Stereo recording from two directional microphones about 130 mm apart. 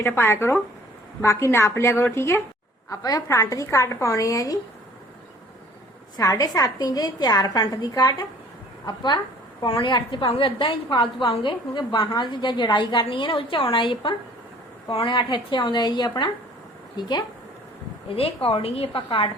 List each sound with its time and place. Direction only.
0.0 s a woman's voice: 15° left (ahead or behind)
6.1 s a woman's voice: 25° left (ahead or behind)
18.4 s a woman's voice: 45° left (ahead or behind)